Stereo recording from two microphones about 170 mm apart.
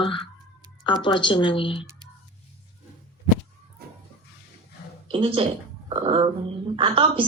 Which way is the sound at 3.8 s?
65° right (ahead or behind).